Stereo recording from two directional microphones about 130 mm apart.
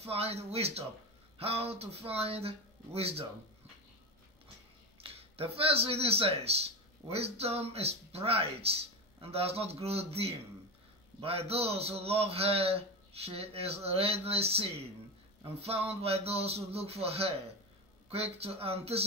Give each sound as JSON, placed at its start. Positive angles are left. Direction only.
{"t": 0.0, "sound": "speech", "side_deg": -50}
{"t": 5.0, "sound": "speech", "side_deg": -50}